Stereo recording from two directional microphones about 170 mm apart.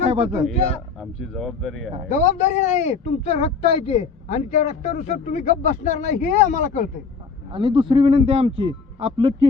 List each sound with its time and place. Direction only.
0.0 s a man's voice: 35° right (ahead or behind)
0.9 s speech: centre (ahead or behind)
2.0 s a man's voice: 40° left (ahead or behind)
7.5 s speech: 30° right (ahead or behind)